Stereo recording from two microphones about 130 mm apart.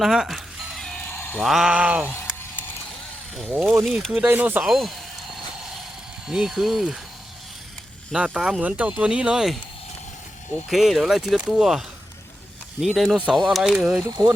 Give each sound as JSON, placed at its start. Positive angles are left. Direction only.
{"t": 0.0, "sound": "music", "side_deg": -5}
{"t": 1.4, "sound": "speech", "side_deg": 0}
{"t": 3.8, "sound": "speech", "side_deg": 0}
{"t": 4.1, "sound": "speech", "side_deg": -10}
{"t": 4.6, "sound": "speech", "side_deg": 0}
{"t": 6.2, "sound": "speech", "side_deg": -5}
{"t": 8.1, "sound": "speech", "side_deg": -5}
{"t": 10.7, "sound": "speech", "side_deg": 0}
{"t": 13.9, "sound": "speech", "side_deg": -25}